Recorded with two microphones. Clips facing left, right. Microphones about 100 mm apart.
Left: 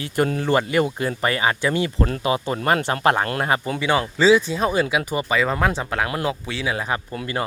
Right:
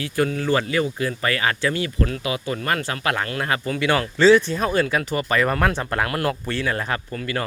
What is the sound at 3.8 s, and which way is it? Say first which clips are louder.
Speech: right 4 dB; 5° left (ahead or behind).